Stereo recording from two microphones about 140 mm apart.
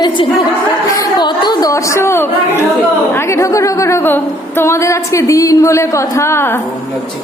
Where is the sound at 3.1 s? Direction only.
20° left (ahead or behind).